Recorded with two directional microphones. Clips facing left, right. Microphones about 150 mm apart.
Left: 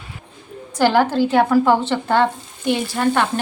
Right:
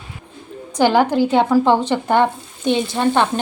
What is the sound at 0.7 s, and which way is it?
A woman's voice, 15° right (ahead or behind).